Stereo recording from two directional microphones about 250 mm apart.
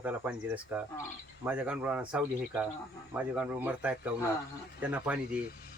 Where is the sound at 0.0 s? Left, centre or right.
Centre.